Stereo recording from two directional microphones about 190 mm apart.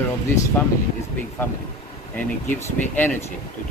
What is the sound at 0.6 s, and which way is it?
Speech, 10° left (ahead or behind).